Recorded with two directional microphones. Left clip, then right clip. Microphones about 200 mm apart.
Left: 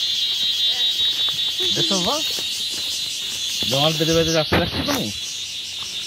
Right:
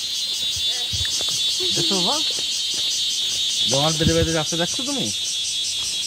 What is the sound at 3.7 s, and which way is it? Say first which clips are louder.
Speech: left 5 dB; 30° left (ahead or behind).